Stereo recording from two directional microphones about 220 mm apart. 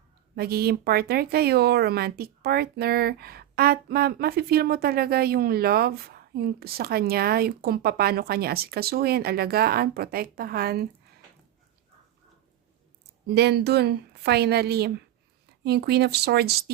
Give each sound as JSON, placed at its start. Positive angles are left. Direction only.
{"t": 0.3, "sound": "speech", "side_deg": -45}
{"t": 13.3, "sound": "speech", "side_deg": -45}